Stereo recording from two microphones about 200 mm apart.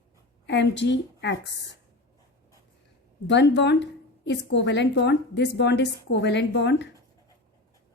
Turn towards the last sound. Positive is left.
turn(degrees=60)  # may be behind; listen again after turning